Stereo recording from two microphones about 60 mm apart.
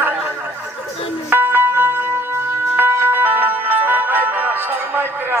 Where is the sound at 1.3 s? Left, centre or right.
Right.